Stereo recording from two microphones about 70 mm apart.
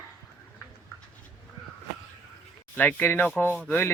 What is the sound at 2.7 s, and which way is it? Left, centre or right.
Speech, left.